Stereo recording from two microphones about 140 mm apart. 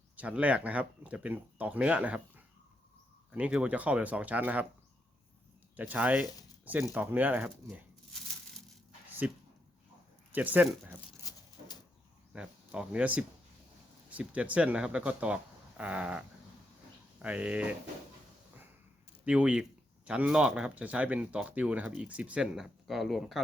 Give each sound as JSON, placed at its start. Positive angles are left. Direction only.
{"t": 0.2, "sound": "speech", "side_deg": -10}
{"t": 5.9, "sound": "speech", "side_deg": -10}
{"t": 9.2, "sound": "speech", "side_deg": -10}
{"t": 11.2, "sound": "dog", "side_deg": 25}
{"t": 12.3, "sound": "speech", "side_deg": -5}
{"t": 17.2, "sound": "speech", "side_deg": -10}
{"t": 19.2, "sound": "speech", "side_deg": -10}